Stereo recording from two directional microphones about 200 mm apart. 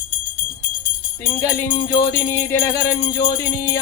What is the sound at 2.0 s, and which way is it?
Music, 15° left (ahead or behind).